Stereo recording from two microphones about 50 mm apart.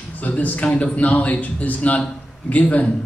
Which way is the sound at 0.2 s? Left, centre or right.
Left.